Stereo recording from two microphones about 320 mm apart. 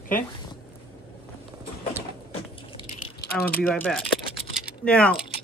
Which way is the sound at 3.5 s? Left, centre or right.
Left.